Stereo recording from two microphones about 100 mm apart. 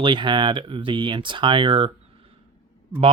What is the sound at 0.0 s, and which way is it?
Speech, 55° right (ahead or behind).